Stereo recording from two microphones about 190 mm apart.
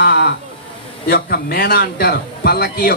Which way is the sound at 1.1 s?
55° left (ahead or behind).